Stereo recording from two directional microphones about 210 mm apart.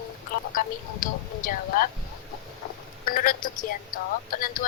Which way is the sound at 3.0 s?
40° left (ahead or behind).